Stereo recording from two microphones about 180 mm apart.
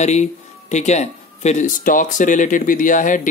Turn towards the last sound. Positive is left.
turn(degrees=45)  # may be behind; listen again after turning